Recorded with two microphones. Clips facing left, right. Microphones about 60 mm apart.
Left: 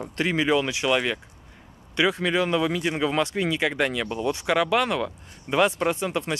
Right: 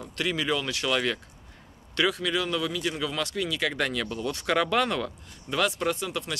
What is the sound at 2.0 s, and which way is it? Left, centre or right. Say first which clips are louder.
Speech: left 4 dB; left.